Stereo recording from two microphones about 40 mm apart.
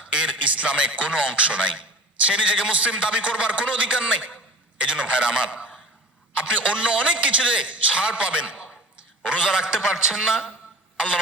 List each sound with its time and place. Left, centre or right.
0.1 s a man's voice: right; by 10.4 s centre